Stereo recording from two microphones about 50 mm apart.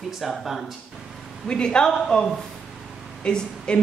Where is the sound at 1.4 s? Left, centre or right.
Centre.